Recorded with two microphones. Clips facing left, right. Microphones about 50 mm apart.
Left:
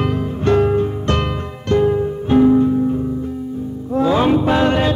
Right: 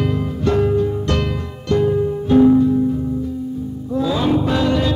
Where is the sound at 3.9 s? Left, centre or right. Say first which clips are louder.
Left 3 dB; left.